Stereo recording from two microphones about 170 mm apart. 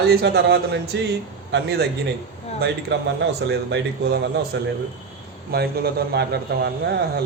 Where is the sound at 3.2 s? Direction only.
90° right.